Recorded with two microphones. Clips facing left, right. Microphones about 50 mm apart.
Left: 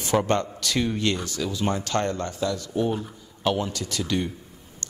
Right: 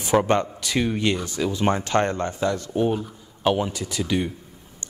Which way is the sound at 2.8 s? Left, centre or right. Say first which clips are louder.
Right 3 dB; centre.